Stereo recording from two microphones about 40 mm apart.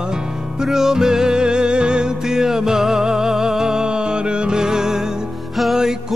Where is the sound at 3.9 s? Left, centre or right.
Right.